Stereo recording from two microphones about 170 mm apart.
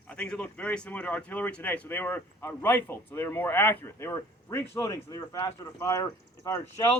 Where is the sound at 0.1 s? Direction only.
5° left (ahead or behind).